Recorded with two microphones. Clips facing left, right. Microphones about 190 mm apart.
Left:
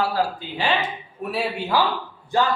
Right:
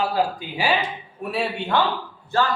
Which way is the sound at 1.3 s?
Centre (ahead or behind).